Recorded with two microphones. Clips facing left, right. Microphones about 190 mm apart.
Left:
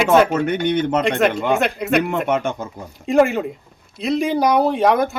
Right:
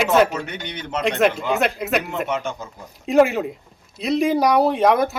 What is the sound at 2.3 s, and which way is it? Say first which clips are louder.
Speech: left 5 dB; 55° left (ahead or behind).